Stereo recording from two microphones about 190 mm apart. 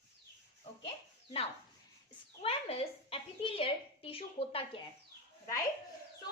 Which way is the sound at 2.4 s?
30° left (ahead or behind).